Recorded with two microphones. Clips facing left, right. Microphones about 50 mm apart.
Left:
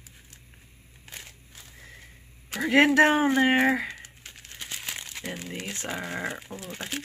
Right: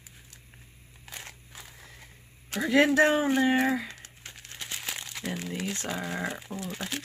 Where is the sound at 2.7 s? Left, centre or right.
Left.